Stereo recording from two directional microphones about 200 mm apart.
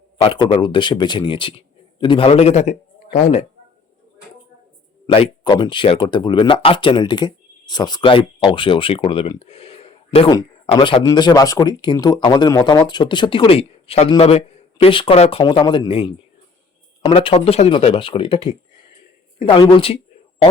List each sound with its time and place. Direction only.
0.2 s speech: 25° left (ahead or behind)
5.0 s speech: 25° left (ahead or behind)
19.5 s speech: 25° left (ahead or behind)